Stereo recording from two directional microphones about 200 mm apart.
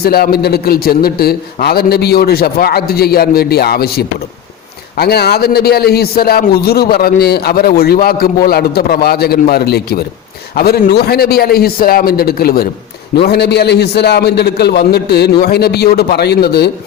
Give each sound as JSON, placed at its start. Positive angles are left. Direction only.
{"t": 0.0, "sound": "a man's voice", "side_deg": 50}